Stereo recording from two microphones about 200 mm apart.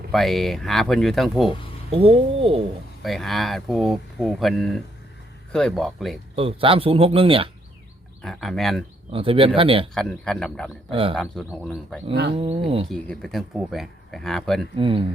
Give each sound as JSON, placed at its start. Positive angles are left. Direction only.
{"t": 0.1, "sound": "speech", "side_deg": 0}
{"t": 1.9, "sound": "a man's voice", "side_deg": -30}
{"t": 3.0, "sound": "speech", "side_deg": 0}
{"t": 6.3, "sound": "a man's voice", "side_deg": -30}
{"t": 8.2, "sound": "speech", "side_deg": 0}
{"t": 9.1, "sound": "a man's voice", "side_deg": -25}
{"t": 9.9, "sound": "speech", "side_deg": 5}
{"t": 10.9, "sound": "a man's voice", "side_deg": -25}
{"t": 11.2, "sound": "speech", "side_deg": 0}
{"t": 12.3, "sound": "a man's voice", "side_deg": -30}
{"t": 12.9, "sound": "speech", "side_deg": 0}
{"t": 14.8, "sound": "a man's voice", "side_deg": -25}